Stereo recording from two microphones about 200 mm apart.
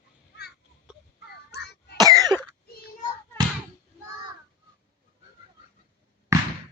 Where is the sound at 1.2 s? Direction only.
55° left (ahead or behind).